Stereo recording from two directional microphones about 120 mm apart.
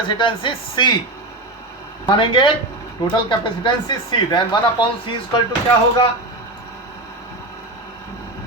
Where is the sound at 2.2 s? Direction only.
40° left (ahead or behind).